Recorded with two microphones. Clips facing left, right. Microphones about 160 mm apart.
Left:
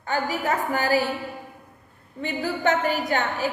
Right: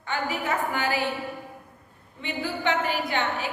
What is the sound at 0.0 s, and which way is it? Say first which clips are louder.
A woman's voice: left 3 dB; 40° left (ahead or behind).